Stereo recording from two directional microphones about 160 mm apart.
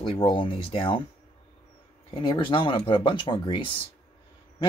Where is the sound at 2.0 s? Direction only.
30° left (ahead or behind).